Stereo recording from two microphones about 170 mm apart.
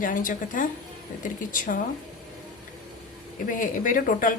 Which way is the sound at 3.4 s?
50° left (ahead or behind).